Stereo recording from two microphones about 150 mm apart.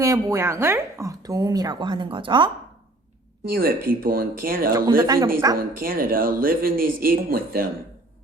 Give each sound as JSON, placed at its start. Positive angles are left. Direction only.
{"t": 0.0, "sound": "speech", "side_deg": -20}
{"t": 3.5, "sound": "speech", "side_deg": -80}
{"t": 4.9, "sound": "speech", "side_deg": -25}
{"t": 5.5, "sound": "speech", "side_deg": -75}